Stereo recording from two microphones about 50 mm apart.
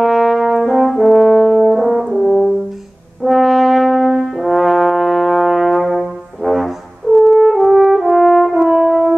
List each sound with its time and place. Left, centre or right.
0.0 s brass instrument: centre
1.7 s french horn: centre
2.1 s french horn: centre
3.3 s brass instrument: centre